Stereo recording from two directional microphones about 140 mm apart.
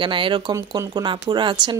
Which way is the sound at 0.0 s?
35° right (ahead or behind).